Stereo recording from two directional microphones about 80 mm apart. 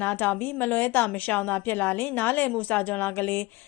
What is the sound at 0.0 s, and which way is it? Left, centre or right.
A woman's voice, left.